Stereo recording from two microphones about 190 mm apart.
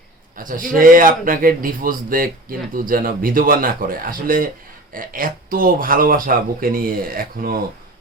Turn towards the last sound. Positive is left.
turn(degrees=-50)  # may be behind; listen again after turning